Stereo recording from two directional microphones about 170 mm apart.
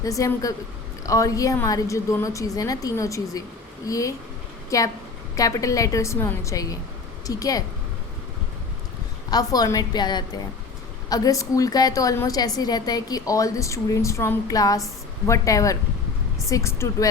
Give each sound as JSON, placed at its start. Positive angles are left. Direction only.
{"t": 0.0, "sound": "a woman's voice", "side_deg": 20}
{"t": 9.3, "sound": "a woman's voice", "side_deg": 20}